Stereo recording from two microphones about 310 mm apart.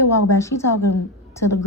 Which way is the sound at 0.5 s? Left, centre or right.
Left.